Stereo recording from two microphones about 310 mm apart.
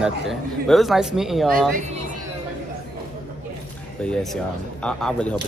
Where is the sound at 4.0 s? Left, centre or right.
Centre.